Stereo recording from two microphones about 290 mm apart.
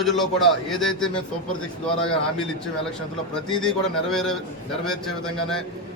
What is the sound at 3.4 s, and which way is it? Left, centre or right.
Speech, centre.